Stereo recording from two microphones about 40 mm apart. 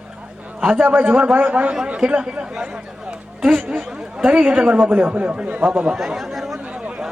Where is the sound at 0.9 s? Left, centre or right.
Right.